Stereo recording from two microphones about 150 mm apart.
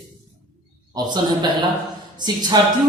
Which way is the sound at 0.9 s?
30° right (ahead or behind).